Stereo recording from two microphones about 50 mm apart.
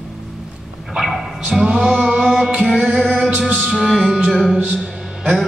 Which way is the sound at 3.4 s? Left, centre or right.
Centre.